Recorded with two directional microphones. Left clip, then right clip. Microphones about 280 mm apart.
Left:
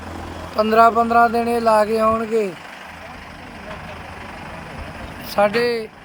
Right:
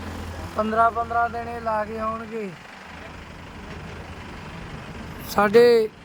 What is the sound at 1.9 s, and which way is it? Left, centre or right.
Speech, left.